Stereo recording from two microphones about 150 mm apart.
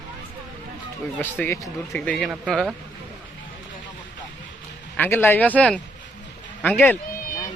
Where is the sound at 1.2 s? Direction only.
15° left (ahead or behind).